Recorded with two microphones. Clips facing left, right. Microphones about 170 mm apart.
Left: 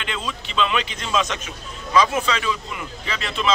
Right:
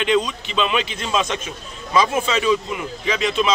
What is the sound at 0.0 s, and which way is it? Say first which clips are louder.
Speech: right 10 dB; 15° right (ahead or behind).